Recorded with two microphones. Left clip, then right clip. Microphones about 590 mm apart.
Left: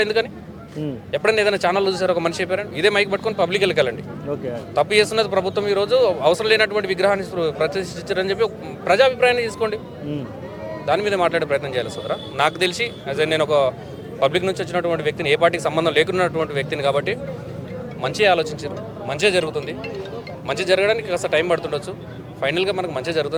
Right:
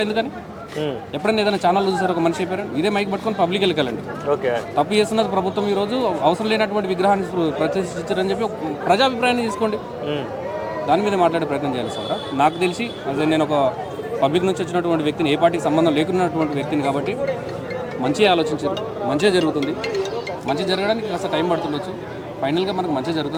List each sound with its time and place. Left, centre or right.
0.0 s speech: left
10.8 s speech: left
20.6 s speech: left